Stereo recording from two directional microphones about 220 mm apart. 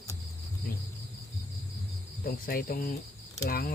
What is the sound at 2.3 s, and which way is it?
Cricket, 40° left (ahead or behind).